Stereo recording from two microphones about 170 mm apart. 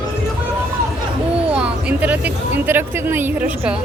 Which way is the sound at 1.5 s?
5° right (ahead or behind).